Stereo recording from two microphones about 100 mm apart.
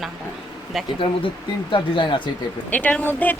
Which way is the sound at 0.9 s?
60° left (ahead or behind).